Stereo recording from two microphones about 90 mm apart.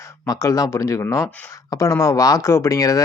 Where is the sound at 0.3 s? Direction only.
40° left (ahead or behind).